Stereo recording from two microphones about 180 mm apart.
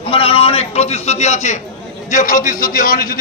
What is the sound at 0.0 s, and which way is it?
A man's voice, 30° left (ahead or behind).